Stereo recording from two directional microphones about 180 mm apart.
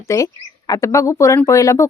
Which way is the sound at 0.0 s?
15° left (ahead or behind).